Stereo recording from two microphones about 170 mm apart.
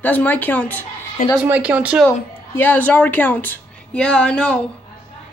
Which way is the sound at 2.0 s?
10° left (ahead or behind).